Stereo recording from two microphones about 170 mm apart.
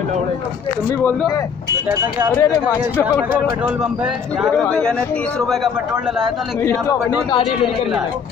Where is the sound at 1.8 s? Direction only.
15° right (ahead or behind).